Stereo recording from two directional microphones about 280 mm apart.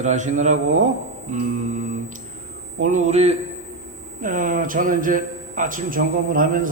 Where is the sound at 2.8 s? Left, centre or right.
Right.